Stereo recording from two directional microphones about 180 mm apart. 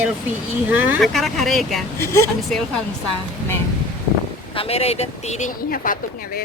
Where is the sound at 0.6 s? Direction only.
10° right (ahead or behind).